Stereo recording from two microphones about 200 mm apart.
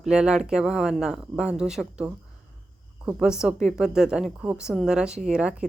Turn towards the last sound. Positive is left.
turn(degrees=-5)  # may be behind; listen again after turning